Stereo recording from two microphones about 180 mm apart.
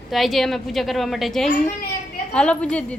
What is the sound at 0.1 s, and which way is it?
A woman's voice, centre (ahead or behind).